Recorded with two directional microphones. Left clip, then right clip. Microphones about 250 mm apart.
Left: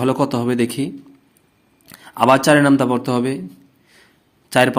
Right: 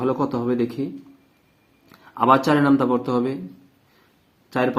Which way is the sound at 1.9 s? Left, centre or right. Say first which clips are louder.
Left 3 dB; left.